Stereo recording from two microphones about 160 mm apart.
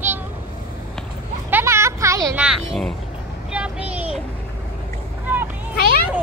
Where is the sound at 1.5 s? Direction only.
15° right (ahead or behind).